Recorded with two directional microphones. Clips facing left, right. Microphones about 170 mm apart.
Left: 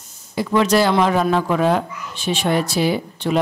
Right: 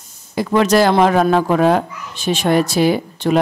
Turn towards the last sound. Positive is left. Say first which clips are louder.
# right 3 dB
turn(degrees=-50)  # may be behind; listen again after turning